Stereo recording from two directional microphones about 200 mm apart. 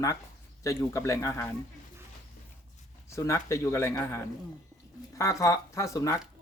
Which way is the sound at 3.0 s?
15° left (ahead or behind).